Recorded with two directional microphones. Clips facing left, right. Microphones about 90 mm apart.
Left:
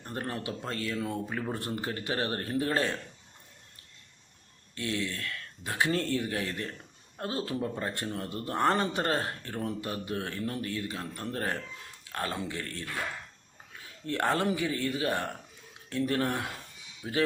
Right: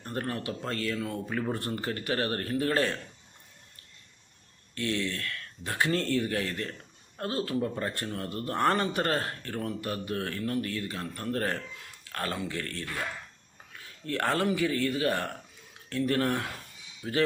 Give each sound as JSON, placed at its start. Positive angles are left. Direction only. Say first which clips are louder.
{"t": 0.0, "sound": "speech", "louder": "right 2 dB", "side_deg": 15}
{"t": 1.3, "sound": "speech", "louder": "right 3 dB", "side_deg": 5}
{"t": 1.5, "sound": "speech", "louder": "right 1 dB", "side_deg": 15}
{"t": 4.7, "sound": "speech", "louder": "right 2 dB", "side_deg": 15}
{"t": 14.1, "sound": "speech", "louder": "even", "side_deg": 20}